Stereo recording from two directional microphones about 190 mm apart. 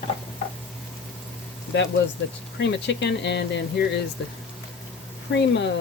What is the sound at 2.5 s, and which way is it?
Speech, 70° left (ahead or behind).